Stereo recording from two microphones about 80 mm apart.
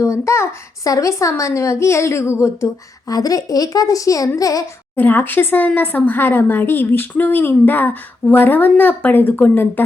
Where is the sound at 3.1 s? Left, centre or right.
Left.